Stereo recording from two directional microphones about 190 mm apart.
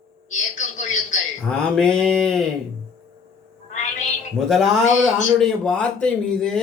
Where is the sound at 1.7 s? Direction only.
5° left (ahead or behind).